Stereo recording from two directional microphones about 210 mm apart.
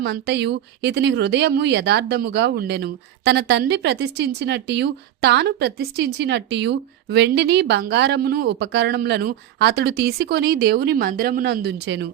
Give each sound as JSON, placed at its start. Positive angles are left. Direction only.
{"t": 0.0, "sound": "speech", "side_deg": -50}